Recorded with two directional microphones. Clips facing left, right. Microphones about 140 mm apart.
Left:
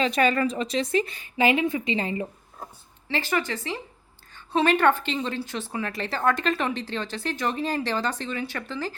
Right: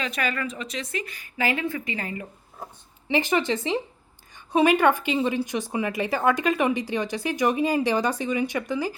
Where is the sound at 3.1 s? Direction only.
15° right (ahead or behind).